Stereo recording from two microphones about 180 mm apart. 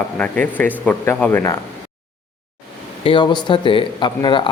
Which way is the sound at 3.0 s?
25° left (ahead or behind).